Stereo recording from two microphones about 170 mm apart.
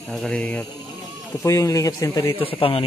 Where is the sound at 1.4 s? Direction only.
20° left (ahead or behind).